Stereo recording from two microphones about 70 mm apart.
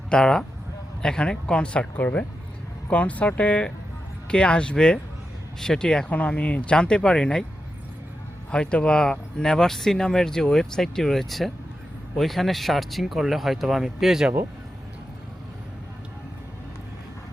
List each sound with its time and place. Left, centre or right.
0.1 s speech: centre
8.4 s speech: centre